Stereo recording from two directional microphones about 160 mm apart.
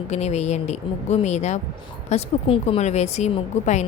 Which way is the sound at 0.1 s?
45° left (ahead or behind).